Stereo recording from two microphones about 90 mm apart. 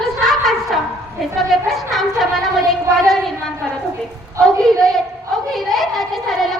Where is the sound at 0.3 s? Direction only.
Centre (ahead or behind).